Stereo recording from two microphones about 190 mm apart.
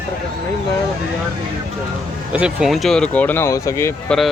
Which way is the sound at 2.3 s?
5° right (ahead or behind).